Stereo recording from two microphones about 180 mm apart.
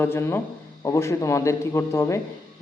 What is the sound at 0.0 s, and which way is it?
Speech, 15° left (ahead or behind).